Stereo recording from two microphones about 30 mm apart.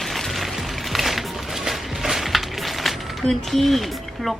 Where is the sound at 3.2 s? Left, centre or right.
Centre.